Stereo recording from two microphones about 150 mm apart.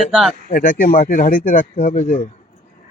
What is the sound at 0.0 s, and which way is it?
Speech, centre (ahead or behind).